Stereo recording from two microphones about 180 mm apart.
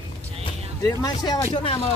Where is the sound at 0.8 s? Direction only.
20° left (ahead or behind).